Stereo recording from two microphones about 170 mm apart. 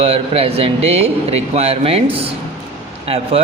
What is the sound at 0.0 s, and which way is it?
Speech, 35° right (ahead or behind).